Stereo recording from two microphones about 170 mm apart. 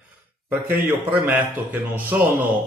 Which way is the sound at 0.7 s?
10° right (ahead or behind).